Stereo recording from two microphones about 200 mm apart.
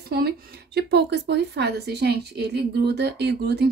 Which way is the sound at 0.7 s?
55° right (ahead or behind).